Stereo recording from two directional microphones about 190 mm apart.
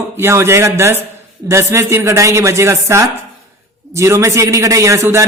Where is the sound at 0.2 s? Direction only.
15° right (ahead or behind).